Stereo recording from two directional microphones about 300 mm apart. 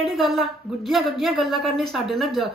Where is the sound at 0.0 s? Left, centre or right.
Centre.